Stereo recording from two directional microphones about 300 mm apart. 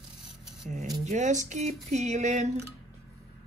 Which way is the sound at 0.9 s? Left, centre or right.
Right.